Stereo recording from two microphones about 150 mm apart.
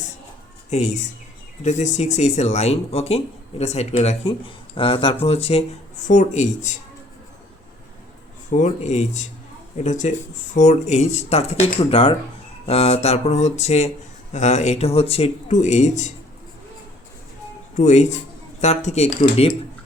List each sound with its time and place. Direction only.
0.7 s speech: 50° left (ahead or behind)
6.1 s speech: 55° left (ahead or behind)
8.4 s speech: 55° left (ahead or behind)
17.7 s speech: 50° left (ahead or behind)